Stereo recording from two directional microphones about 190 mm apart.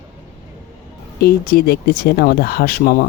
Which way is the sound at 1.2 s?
55° left (ahead or behind).